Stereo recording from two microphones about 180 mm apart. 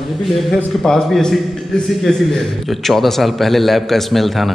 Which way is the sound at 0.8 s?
5° left (ahead or behind).